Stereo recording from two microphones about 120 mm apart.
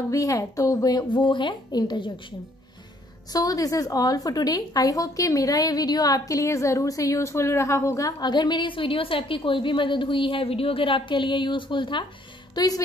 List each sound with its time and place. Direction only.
0.1 s a woman's voice: 30° left (ahead or behind)
3.3 s a woman's voice: 30° left (ahead or behind)
12.5 s a woman's voice: 30° left (ahead or behind)